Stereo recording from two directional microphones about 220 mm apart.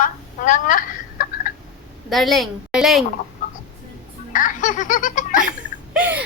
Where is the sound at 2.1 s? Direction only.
Centre (ahead or behind).